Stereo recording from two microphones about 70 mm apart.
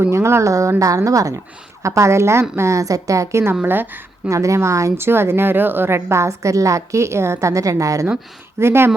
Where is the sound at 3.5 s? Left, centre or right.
Right.